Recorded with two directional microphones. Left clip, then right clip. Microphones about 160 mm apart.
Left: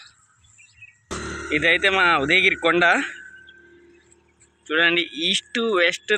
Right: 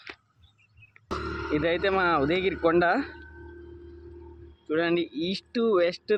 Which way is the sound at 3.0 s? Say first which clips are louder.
Left 9 dB; 70° left (ahead or behind).